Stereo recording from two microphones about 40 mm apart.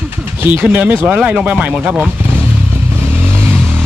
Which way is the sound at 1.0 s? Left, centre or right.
Right.